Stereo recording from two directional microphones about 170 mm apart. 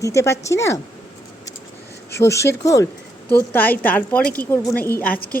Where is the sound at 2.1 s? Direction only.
15° left (ahead or behind).